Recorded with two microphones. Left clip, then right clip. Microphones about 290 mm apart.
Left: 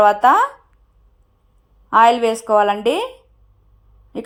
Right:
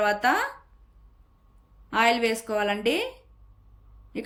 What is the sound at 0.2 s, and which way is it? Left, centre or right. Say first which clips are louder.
Speech: left 11 dB; left.